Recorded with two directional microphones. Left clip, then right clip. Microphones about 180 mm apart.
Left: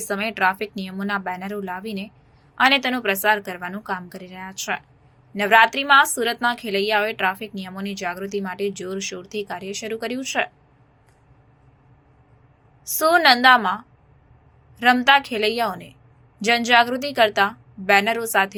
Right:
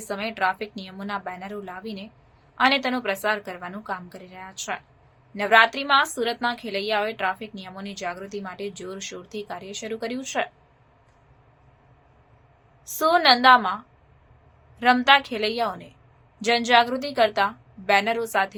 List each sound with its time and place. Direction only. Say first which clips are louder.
0.1 s a woman's voice: left 4 dB; 15° left (ahead or behind)
12.9 s a woman's voice: left 3 dB; 10° left (ahead or behind)